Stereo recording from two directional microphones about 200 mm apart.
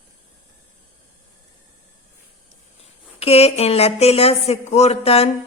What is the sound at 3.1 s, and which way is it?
Speech, 30° left (ahead or behind).